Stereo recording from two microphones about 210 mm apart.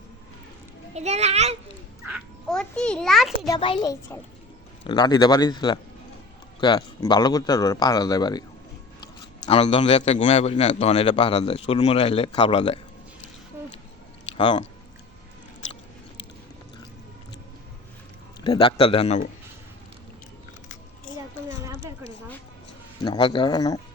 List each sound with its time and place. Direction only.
0.9 s a child's voice: 30° right (ahead or behind)
2.0 s a child's voice: centre (ahead or behind)
3.4 s a child's voice: 20° left (ahead or behind)
9.5 s a man's voice: 25° left (ahead or behind)
14.3 s speech: 25° left (ahead or behind)
18.4 s a man's voice: 25° left (ahead or behind)
21.6 s a sound: 15° right (ahead or behind)
23.0 s a man's voice: 20° left (ahead or behind)